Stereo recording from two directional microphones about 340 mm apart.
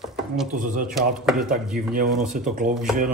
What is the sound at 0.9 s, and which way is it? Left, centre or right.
Speech, centre.